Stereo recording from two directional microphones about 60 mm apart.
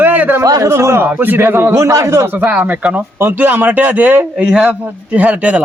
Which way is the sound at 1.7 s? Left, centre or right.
Right.